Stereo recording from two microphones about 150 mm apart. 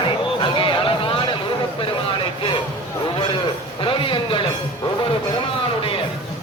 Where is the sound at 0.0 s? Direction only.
35° left (ahead or behind).